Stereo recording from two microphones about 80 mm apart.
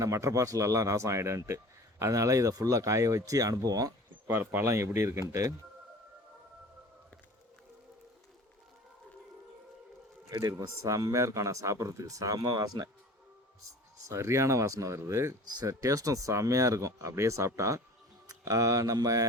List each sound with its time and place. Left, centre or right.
0.0 s speech: right
4.3 s speech: right
10.2 s speech: right
12.4 s speech: right
14.1 s speech: right